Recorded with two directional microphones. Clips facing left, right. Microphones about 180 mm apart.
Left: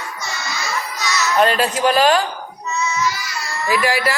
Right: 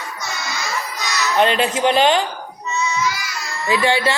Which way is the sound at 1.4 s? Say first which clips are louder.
Even; 25° right (ahead or behind).